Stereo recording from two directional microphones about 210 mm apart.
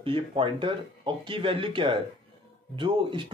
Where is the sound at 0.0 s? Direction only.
25° right (ahead or behind).